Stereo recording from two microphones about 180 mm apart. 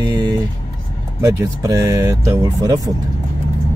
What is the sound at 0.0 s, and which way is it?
Vehicle, 25° right (ahead or behind).